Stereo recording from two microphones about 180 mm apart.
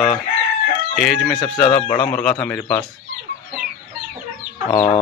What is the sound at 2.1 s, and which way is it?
Speech, 5° left (ahead or behind).